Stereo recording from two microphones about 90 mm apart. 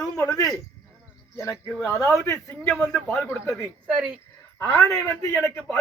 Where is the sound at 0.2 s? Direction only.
40° left (ahead or behind).